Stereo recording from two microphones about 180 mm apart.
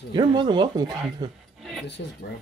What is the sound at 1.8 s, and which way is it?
Speech, 70° left (ahead or behind).